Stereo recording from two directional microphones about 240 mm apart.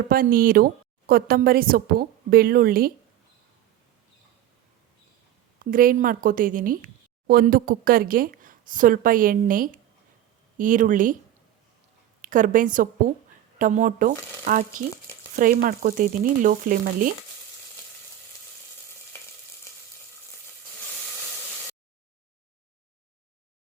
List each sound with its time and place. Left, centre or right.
0.1 s a woman's voice: right
5.7 s a woman's voice: right
12.2 s a woman's voice: right